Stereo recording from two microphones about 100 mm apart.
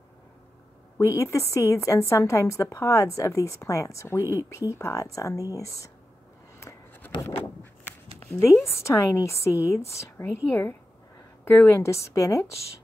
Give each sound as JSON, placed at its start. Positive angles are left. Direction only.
{"t": 0.9, "sound": "a woman's voice", "side_deg": 30}
{"t": 6.6, "sound": "writing", "side_deg": 30}
{"t": 8.6, "sound": "a woman's voice", "side_deg": 30}